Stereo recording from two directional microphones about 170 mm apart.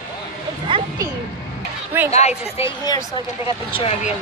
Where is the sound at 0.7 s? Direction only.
30° right (ahead or behind).